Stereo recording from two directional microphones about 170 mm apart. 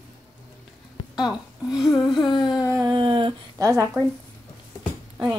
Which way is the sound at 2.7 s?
20° right (ahead or behind).